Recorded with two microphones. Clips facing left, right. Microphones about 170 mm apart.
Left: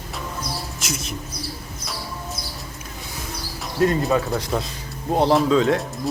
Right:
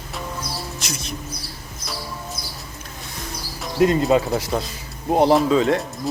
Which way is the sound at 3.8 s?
20° right (ahead or behind).